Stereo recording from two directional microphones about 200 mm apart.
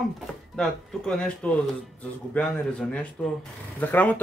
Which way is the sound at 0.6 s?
5° left (ahead or behind).